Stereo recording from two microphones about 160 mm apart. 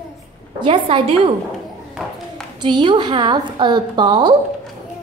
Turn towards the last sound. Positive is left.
turn(degrees=-30)  # may be behind; listen again after turning